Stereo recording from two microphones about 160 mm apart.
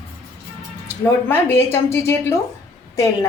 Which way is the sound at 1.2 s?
15° left (ahead or behind).